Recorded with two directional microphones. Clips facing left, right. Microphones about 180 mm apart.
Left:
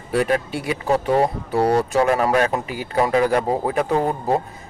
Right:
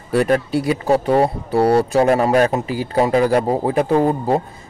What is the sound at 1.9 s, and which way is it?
Speech, 35° right (ahead or behind).